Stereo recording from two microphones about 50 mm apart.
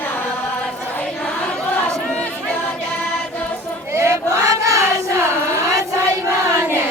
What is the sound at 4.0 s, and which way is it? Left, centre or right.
Choir, right.